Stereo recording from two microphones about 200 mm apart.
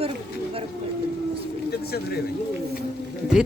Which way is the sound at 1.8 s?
50° left (ahead or behind).